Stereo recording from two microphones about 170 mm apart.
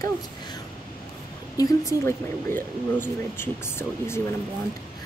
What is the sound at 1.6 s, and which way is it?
Speech, 15° left (ahead or behind).